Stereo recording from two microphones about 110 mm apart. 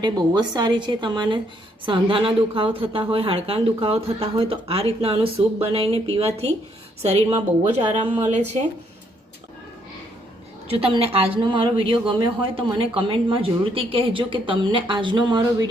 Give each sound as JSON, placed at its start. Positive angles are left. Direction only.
{"t": 0.0, "sound": "a woman's voice", "side_deg": -40}
{"t": 10.7, "sound": "a woman's voice", "side_deg": -55}